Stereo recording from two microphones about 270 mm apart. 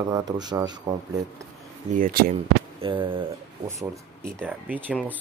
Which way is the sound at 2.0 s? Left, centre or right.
Right.